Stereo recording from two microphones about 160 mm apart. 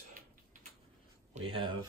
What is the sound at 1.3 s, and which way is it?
Speech, 35° right (ahead or behind).